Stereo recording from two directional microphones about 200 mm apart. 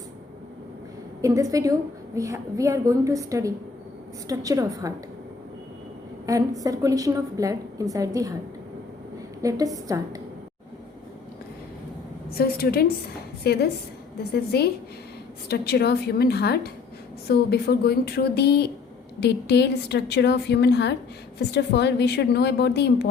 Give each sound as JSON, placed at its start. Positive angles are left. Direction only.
{"t": 1.2, "sound": "a woman's voice", "side_deg": -15}
{"t": 6.2, "sound": "a woman's voice", "side_deg": -15}
{"t": 9.4, "sound": "a woman's voice", "side_deg": -15}
{"t": 12.3, "sound": "a woman's voice", "side_deg": 50}